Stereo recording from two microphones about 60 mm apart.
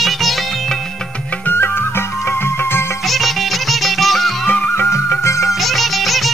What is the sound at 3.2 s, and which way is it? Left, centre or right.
Music, centre.